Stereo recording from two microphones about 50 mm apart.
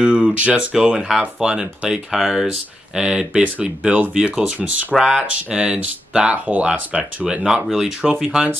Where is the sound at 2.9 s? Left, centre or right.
Centre.